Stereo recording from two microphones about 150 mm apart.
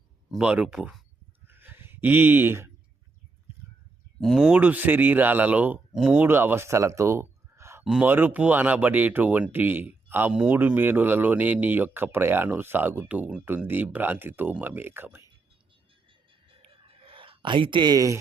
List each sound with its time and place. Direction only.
0.3 s speech: 5° right (ahead or behind)
1.5 s a sound: 15° right (ahead or behind)
4.2 s speech: centre (ahead or behind)
17.0 s speech: 40° right (ahead or behind)